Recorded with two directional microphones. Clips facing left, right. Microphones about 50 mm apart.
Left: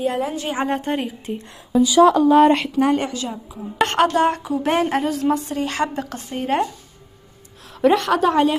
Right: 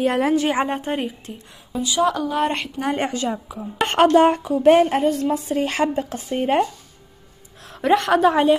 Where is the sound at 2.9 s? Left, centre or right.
Right.